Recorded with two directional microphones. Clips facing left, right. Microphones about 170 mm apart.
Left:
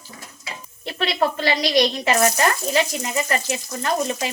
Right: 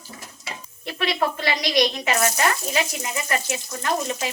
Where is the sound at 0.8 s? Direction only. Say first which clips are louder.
Left 2 dB; 30° left (ahead or behind).